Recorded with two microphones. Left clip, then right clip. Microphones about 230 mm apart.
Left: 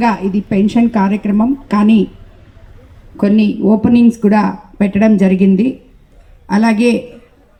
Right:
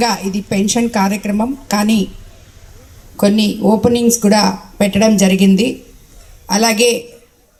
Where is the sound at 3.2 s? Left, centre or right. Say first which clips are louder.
Even; right.